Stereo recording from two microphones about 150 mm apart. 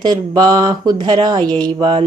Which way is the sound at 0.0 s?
30° right (ahead or behind).